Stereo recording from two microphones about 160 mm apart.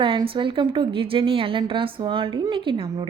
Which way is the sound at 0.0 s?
30° right (ahead or behind).